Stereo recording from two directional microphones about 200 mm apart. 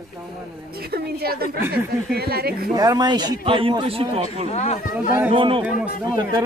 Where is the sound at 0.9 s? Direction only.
50° right (ahead or behind).